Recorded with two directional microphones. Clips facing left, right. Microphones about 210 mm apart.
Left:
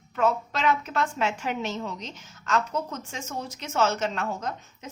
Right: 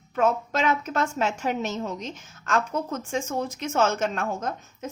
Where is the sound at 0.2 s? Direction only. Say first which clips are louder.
Right 2 dB; 45° right (ahead or behind).